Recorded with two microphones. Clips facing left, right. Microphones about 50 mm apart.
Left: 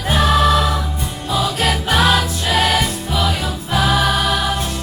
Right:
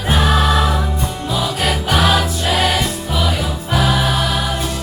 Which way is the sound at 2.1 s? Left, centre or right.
Centre.